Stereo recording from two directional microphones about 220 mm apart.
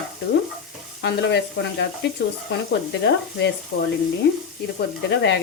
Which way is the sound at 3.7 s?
45° left (ahead or behind).